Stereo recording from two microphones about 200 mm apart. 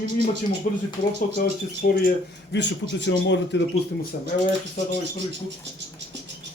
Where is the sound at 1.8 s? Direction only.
45° left (ahead or behind).